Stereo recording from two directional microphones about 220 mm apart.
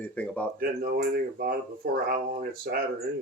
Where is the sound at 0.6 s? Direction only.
45° right (ahead or behind).